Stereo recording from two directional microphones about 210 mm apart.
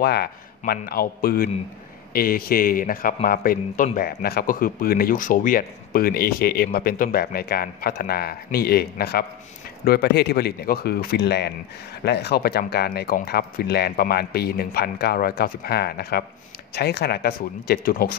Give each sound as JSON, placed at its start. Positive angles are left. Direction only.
{"t": 0.0, "sound": "speech", "side_deg": 50}